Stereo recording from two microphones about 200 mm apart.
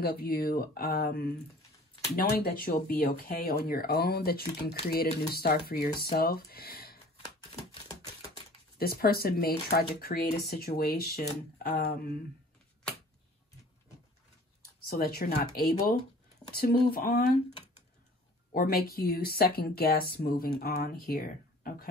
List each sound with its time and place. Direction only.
0.0 s speech: 50° left (ahead or behind)
8.7 s speech: 50° left (ahead or behind)
14.9 s speech: 50° left (ahead or behind)
16.5 s speech: 50° left (ahead or behind)
18.5 s speech: 50° left (ahead or behind)